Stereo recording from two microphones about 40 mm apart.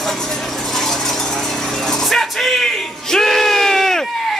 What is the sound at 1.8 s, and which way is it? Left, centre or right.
Bellow, centre.